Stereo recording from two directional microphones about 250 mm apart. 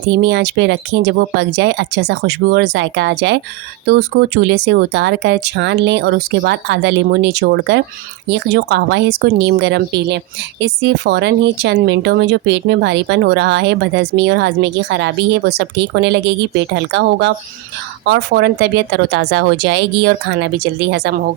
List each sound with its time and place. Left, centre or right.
0.0 s speech: right